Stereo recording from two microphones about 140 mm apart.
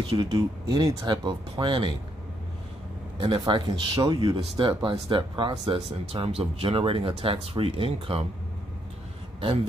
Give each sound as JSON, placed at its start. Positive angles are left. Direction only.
{"t": 0.0, "sound": "speech", "side_deg": -30}
{"t": 3.2, "sound": "speech", "side_deg": -35}